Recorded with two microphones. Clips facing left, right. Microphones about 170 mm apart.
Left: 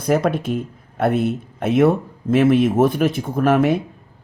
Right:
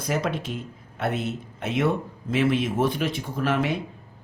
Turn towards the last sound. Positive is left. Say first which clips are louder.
# left 8 dB
turn(degrees=50)  # may be behind; listen again after turning